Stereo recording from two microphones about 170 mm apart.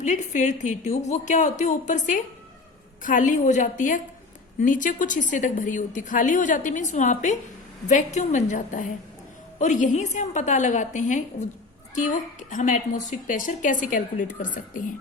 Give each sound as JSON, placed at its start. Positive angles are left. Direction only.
{"t": 0.0, "sound": "a woman's voice", "side_deg": 45}